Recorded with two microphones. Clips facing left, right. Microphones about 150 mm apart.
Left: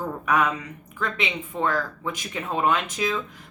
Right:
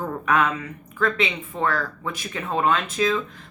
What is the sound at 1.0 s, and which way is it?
A woman's voice, 15° left (ahead or behind).